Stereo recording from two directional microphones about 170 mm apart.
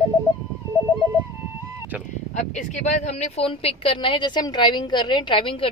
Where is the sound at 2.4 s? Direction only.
45° left (ahead or behind).